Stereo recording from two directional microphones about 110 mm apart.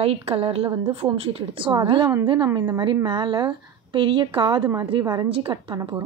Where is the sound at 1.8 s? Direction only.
50° right (ahead or behind).